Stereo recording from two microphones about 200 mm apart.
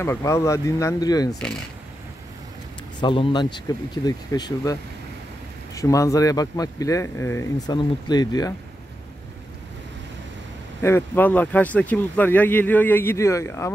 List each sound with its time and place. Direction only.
0.0 s speech: 15° left (ahead or behind)
3.0 s speech: 25° left (ahead or behind)
5.8 s speech: 15° left (ahead or behind)
10.8 s speech: 10° left (ahead or behind)